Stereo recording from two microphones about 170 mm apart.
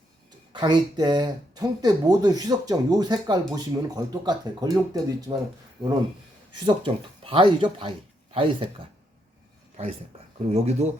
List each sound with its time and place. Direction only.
0.5 s speech: 25° right (ahead or behind)
6.5 s speech: 30° right (ahead or behind)